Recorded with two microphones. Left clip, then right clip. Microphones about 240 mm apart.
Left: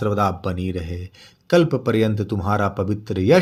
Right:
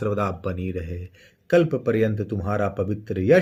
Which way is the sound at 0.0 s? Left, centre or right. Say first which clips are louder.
Left 4 dB; centre.